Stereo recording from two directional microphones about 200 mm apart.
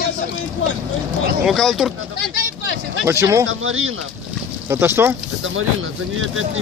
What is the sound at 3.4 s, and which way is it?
Speech, 85° right.